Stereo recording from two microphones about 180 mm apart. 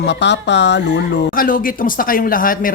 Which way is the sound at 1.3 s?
50° left (ahead or behind).